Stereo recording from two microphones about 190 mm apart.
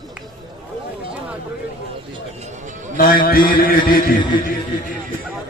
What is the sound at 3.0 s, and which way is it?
A man's voice, 50° left (ahead or behind).